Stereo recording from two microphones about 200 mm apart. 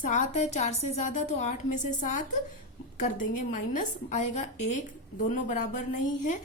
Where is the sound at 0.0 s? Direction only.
35° left (ahead or behind).